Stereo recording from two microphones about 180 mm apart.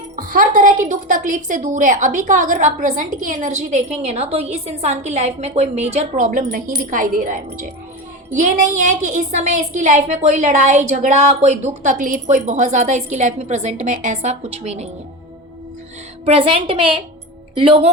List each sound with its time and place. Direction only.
0.2 s a woman's voice: 50° right (ahead or behind)
16.2 s a woman's voice: 35° right (ahead or behind)